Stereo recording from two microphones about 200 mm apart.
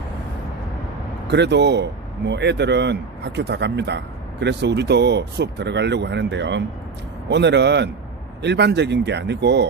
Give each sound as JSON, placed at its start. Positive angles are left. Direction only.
{"t": 1.3, "sound": "speech", "side_deg": -60}